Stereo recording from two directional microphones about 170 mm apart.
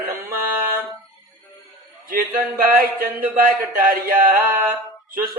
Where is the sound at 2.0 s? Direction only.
55° right (ahead or behind).